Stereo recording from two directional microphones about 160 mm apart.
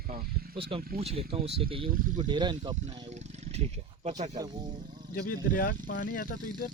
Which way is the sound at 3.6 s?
45° right (ahead or behind).